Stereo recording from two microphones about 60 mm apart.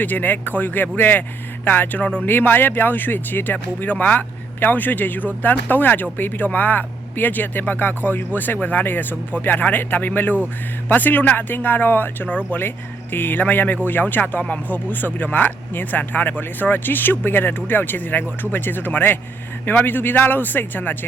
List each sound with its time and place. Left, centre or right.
0.0 s speech: left